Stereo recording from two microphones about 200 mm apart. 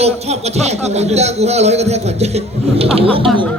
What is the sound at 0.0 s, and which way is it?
Speech, 30° right (ahead or behind).